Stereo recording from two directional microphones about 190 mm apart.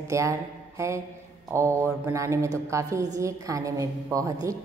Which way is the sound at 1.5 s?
15° right (ahead or behind).